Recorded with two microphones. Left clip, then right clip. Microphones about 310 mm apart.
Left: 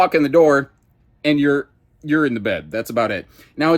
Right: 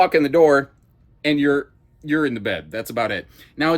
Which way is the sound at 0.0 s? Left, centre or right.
Centre.